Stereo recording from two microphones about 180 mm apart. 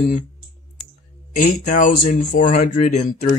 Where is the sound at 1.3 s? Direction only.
45° left (ahead or behind).